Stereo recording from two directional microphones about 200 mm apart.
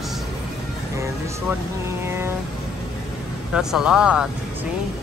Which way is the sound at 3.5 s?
5° right (ahead or behind).